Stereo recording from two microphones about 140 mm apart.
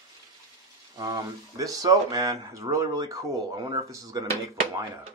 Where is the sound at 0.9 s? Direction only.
25° right (ahead or behind).